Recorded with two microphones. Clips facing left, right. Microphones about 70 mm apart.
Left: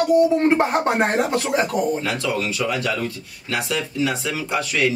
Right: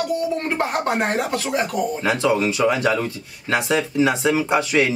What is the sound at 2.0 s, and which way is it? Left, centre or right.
Speech, right.